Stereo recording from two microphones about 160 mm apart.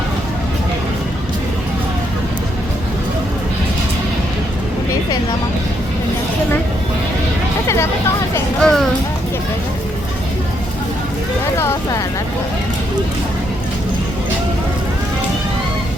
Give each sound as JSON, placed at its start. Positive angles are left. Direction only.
{"t": 8.6, "sound": "music", "side_deg": 5}
{"t": 11.5, "sound": "vehicle", "side_deg": 15}